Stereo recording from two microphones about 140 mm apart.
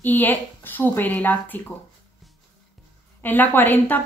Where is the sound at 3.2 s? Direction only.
15° left (ahead or behind).